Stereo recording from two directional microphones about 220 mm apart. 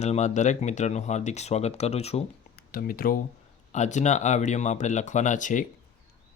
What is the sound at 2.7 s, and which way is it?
Speech, 40° left (ahead or behind).